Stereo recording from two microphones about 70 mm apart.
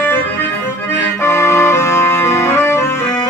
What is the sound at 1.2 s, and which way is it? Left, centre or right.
Organ, left.